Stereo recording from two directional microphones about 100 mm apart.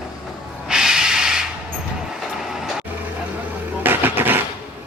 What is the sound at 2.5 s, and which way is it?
Vehicle, 5° right (ahead or behind).